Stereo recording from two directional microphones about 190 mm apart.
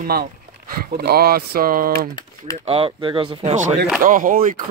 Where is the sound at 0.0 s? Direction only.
50° right (ahead or behind).